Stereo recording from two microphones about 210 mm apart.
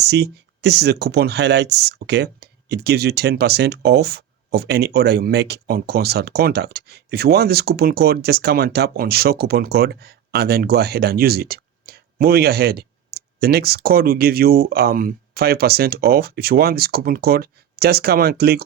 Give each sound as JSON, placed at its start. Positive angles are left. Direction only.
{"t": 0.0, "sound": "speech", "side_deg": -55}